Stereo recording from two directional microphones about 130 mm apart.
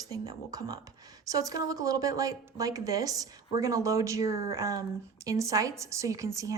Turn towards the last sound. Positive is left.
turn(degrees=-25)  # may be behind; listen again after turning